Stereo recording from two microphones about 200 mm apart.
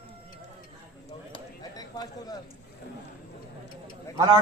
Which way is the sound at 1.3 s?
20° left (ahead or behind).